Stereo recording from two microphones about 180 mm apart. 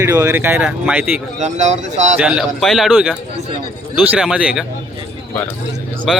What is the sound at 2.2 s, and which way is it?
Speech, 5° right (ahead or behind).